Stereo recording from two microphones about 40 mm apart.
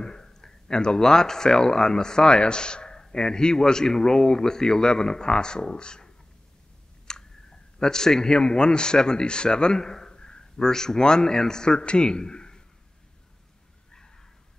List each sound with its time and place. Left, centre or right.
0.0 s speech: centre